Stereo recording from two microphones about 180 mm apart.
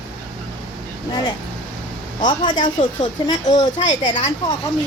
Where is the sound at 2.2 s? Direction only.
25° left (ahead or behind).